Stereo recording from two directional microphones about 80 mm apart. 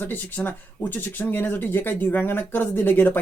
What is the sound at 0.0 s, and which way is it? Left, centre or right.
Speech, left.